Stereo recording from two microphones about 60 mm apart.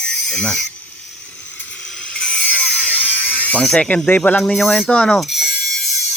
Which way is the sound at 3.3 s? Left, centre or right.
Left.